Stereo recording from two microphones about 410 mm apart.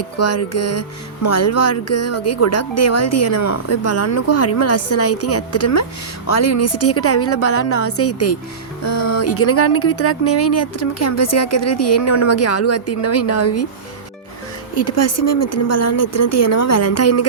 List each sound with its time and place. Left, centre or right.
0.2 s music: left
14.8 s music: left